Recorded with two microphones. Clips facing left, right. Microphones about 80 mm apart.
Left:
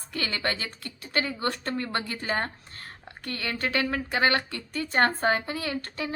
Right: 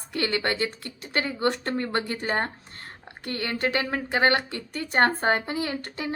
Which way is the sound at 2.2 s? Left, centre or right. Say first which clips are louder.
Right 2 dB; right.